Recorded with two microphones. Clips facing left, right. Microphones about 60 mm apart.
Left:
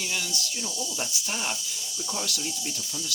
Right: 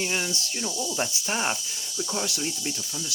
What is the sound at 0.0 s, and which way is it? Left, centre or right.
Speech, right.